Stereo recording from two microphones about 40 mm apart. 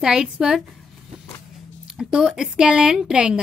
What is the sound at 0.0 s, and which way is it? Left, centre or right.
Speech, centre.